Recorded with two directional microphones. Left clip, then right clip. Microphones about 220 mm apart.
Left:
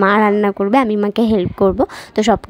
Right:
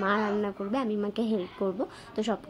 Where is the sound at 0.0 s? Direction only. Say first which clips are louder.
Left 15 dB; 45° left (ahead or behind).